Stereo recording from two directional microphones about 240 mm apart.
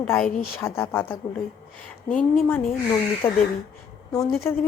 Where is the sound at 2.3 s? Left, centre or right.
Centre.